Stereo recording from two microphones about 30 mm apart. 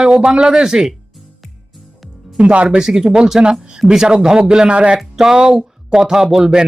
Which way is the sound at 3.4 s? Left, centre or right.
Right.